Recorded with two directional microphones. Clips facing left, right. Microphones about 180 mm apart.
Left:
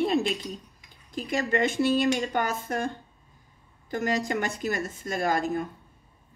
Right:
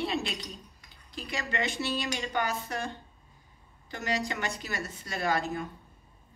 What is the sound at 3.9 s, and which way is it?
A woman's voice, 50° left (ahead or behind).